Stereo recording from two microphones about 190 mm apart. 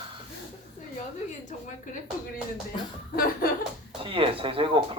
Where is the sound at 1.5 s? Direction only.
45° left (ahead or behind).